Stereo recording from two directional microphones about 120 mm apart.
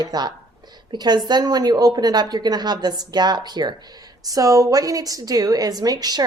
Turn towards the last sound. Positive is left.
turn(degrees=-35)  # may be behind; listen again after turning